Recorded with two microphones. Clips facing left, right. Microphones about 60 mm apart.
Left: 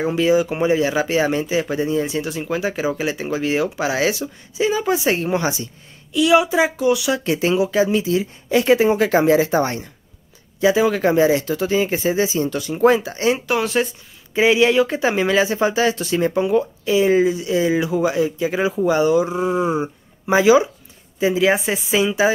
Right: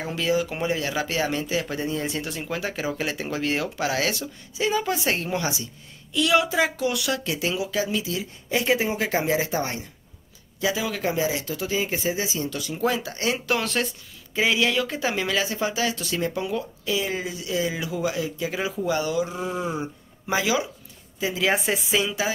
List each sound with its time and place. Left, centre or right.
0.0 s speech: centre
1.8 s speech: centre
5.3 s speech: left
6.1 s speech: centre
7.2 s speech: left
8.5 s a woman's voice: left
10.6 s speech: left
11.0 s speech: left
12.3 s speech: left
13.5 s speech: centre
14.3 s a woman's voice: left
21.5 s a woman's voice: centre
22.0 s speech: left